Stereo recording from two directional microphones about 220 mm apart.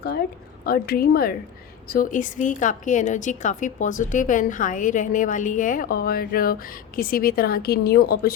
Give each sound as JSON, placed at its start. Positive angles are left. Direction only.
{"t": 0.6, "sound": "a woman's voice", "side_deg": 45}